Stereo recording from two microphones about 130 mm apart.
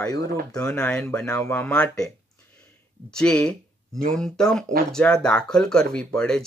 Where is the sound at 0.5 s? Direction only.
5° left (ahead or behind).